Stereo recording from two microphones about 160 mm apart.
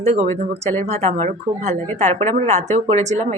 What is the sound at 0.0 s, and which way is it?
Speech, 45° right (ahead or behind).